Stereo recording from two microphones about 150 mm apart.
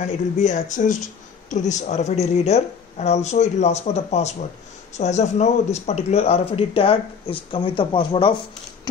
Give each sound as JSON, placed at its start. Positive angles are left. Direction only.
{"t": 0.0, "sound": "a woman's voice", "side_deg": 50}